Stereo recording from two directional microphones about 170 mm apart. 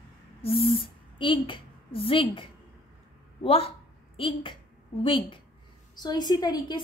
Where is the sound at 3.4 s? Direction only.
35° left (ahead or behind).